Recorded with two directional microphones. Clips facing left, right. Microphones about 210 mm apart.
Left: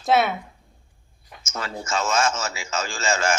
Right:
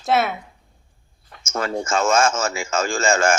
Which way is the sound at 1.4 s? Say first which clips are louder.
Right 7 dB; 50° right (ahead or behind).